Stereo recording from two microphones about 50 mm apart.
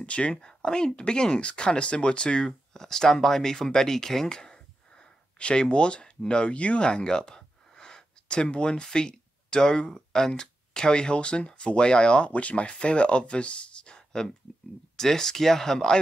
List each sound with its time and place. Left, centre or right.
0.0 s speech: left